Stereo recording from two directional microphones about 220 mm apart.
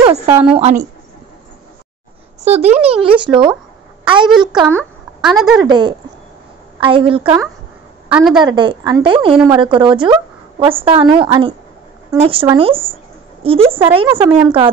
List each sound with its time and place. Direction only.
0.0 s a woman's voice: 25° right (ahead or behind)
2.4 s a woman's voice: 30° right (ahead or behind); by 5.5 s centre (ahead or behind)
5.6 s a woman's voice: 20° right (ahead or behind)
8.1 s a woman's voice: centre (ahead or behind)
8.4 s a woman's voice: 20° right (ahead or behind)
14.2 s a woman's voice: 5° right (ahead or behind)